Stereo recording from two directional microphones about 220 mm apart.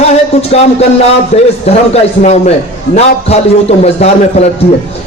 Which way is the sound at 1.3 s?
35° left (ahead or behind).